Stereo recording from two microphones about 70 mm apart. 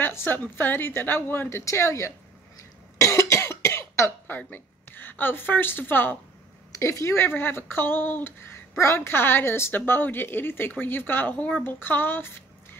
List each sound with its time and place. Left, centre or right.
0.0 s a woman's voice: left
3.0 s cough: left
4.4 s a woman's voice: left
6.7 s a woman's voice: left